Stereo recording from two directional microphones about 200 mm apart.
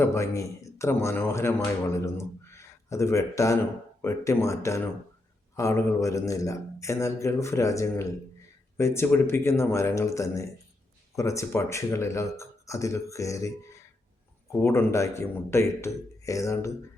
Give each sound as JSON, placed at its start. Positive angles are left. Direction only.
{"t": 0.0, "sound": "a man's voice", "side_deg": 15}